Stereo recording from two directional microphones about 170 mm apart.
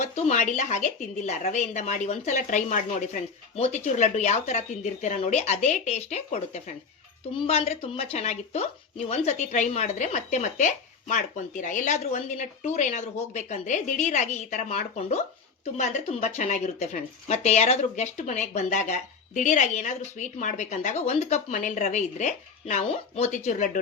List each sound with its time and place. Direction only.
0.0 s speech: 45° left (ahead or behind)